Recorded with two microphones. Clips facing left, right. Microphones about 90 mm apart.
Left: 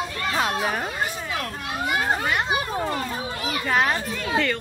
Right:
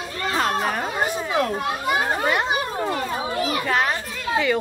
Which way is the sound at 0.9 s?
25° right (ahead or behind).